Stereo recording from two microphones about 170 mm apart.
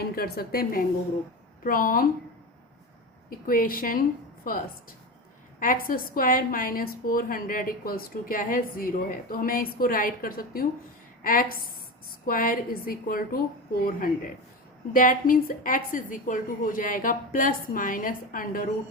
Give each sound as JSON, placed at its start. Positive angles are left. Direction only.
{"t": 0.0, "sound": "a woman's voice", "side_deg": 65}
{"t": 3.2, "sound": "a woman's voice", "side_deg": 55}
{"t": 14.9, "sound": "a woman's voice", "side_deg": 55}